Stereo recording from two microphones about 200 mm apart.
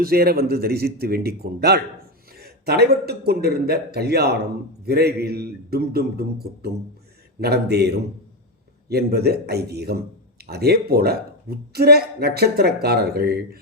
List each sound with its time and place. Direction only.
0.0 s speech: 50° right (ahead or behind)